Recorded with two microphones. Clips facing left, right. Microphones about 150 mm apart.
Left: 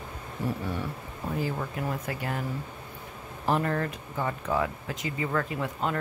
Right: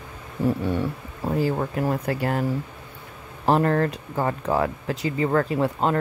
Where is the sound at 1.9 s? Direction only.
65° right (ahead or behind).